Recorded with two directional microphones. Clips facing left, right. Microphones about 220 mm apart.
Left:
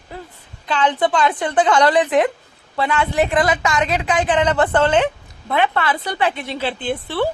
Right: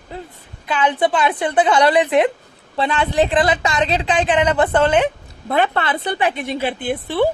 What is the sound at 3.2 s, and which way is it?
A woman's voice, 30° right (ahead or behind).